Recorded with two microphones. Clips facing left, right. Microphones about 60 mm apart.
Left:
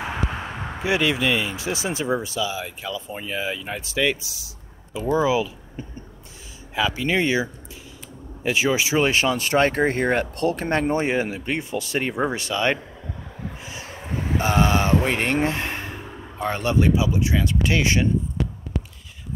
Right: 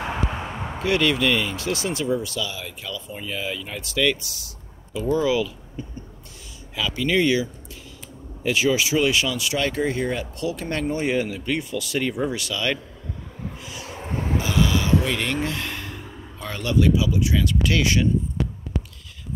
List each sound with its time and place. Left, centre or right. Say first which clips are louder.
0.7 s speech: right 1 dB; centre
8.5 s speech: even; left
13.5 s a sound: right 1 dB; left
13.9 s wind: right 1 dB; centre
14.3 s speech: left 3 dB; left